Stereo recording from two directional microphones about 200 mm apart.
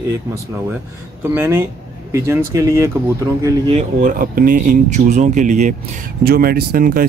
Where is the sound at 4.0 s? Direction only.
45° right (ahead or behind).